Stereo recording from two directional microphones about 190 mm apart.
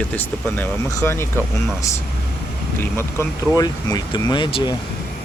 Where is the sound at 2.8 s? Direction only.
15° left (ahead or behind).